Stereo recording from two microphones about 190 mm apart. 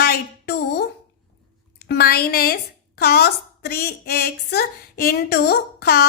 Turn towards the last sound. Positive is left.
turn(degrees=55)  # may be behind; listen again after turning